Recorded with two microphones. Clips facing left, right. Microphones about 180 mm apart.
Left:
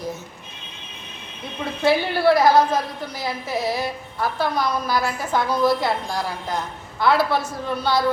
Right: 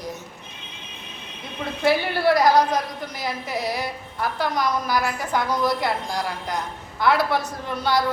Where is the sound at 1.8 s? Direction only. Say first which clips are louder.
Left 2 dB; 25° left (ahead or behind).